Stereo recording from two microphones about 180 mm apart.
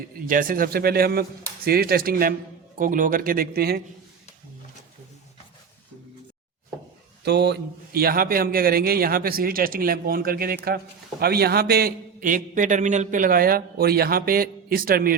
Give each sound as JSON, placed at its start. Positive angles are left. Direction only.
{"t": 0.3, "sound": "a man's voice", "side_deg": -50}
{"t": 7.3, "sound": "a man's voice", "side_deg": -65}